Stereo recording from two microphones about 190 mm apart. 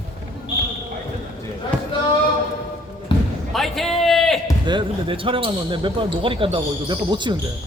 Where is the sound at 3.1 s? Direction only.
25° left (ahead or behind).